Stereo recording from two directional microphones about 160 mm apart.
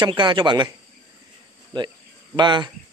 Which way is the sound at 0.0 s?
30° right (ahead or behind).